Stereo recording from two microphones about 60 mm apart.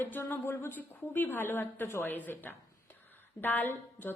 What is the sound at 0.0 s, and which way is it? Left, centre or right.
A woman's voice, left.